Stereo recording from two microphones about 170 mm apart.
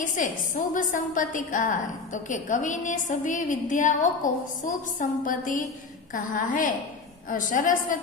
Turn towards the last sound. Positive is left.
turn(degrees=50)  # may be behind; listen again after turning